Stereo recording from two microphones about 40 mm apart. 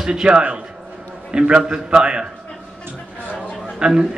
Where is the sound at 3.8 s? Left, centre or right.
Right.